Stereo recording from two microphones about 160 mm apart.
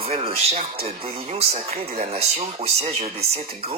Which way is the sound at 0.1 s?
40° right (ahead or behind).